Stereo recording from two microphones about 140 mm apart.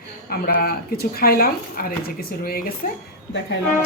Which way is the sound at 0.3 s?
90° left.